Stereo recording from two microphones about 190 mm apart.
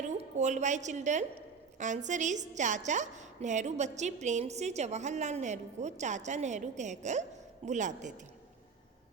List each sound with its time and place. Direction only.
0.2 s a woman's voice: 40° right (ahead or behind)